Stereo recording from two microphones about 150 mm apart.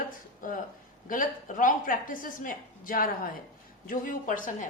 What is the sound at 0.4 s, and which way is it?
A woman's voice, 65° left (ahead or behind).